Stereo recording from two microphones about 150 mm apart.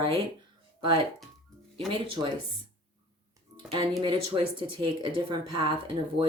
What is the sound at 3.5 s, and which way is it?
Speech, 30° right (ahead or behind).